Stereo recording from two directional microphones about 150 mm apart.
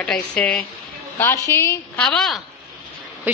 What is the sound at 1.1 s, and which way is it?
Speech, 20° left (ahead or behind).